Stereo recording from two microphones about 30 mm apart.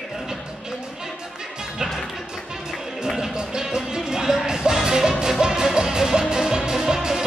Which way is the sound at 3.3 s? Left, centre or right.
Right.